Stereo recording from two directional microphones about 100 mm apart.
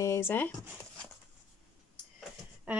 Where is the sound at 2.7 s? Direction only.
15° right (ahead or behind).